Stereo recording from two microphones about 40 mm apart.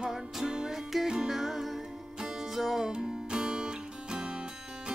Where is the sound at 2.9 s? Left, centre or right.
Centre.